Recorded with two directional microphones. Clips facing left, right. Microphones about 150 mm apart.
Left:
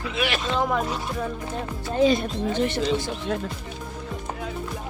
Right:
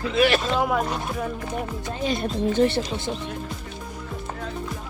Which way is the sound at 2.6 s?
30° right (ahead or behind).